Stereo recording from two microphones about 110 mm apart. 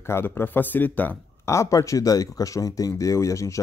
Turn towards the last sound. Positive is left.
turn(degrees=30)  # may be behind; listen again after turning